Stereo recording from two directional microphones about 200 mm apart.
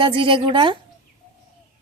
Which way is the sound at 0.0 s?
25° right (ahead or behind).